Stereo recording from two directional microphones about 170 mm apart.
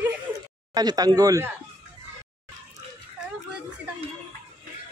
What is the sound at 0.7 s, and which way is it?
Speech, 25° right (ahead or behind).